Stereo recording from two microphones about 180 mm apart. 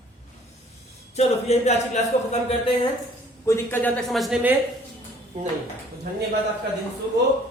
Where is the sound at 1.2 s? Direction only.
35° left (ahead or behind).